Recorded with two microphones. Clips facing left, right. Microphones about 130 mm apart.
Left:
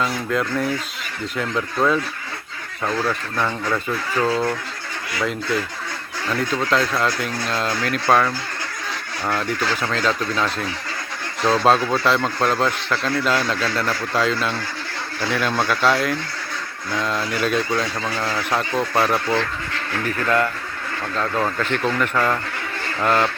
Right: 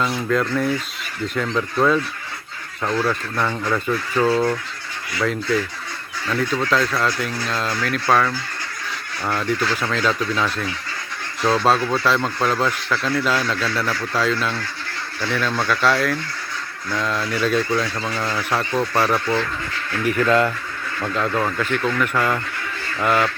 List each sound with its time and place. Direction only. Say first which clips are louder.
0.0 s speech: right 2 dB; 5° left (ahead or behind)
6.3 s speech: even; centre (ahead or behind)
9.8 s speech: right 1 dB; centre (ahead or behind)
20.1 s speech: right 4 dB; 20° right (ahead or behind)
21.3 s speech: even; centre (ahead or behind)